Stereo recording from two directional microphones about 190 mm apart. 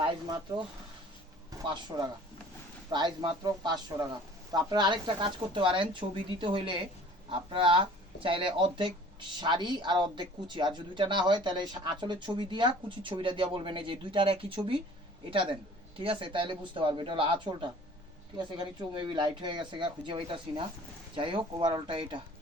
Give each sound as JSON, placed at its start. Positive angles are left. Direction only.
{"t": 0.0, "sound": "speech", "side_deg": -25}
{"t": 1.6, "sound": "speech", "side_deg": -25}